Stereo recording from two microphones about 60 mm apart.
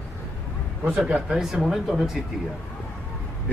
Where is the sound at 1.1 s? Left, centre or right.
Centre.